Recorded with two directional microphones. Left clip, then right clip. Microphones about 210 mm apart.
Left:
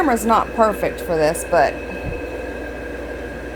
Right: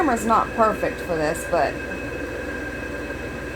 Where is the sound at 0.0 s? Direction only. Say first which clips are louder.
Left 3 dB; 15° left (ahead or behind).